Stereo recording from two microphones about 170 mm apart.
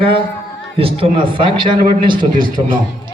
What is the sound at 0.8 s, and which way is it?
A man's voice, 35° right (ahead or behind).